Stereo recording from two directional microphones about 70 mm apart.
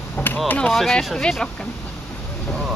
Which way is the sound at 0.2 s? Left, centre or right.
Left.